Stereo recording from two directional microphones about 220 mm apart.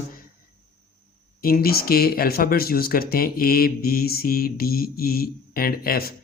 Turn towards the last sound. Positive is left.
turn(degrees=45)  # may be behind; listen again after turning